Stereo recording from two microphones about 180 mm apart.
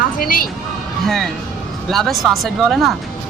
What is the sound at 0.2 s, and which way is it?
Speech, 50° left (ahead or behind).